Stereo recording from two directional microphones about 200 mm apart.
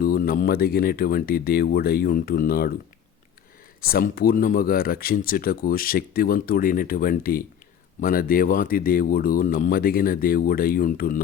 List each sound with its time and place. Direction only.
0.0 s speech: 45° left (ahead or behind)
3.8 s speech: 45° left (ahead or behind)